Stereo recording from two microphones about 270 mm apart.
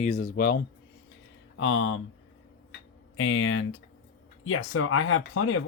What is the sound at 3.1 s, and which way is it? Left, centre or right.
Speech, left.